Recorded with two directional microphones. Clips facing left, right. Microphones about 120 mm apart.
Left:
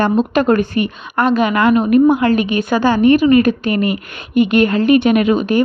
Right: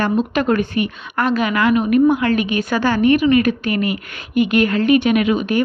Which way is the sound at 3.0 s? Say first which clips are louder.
Left 3 dB; 35° left (ahead or behind).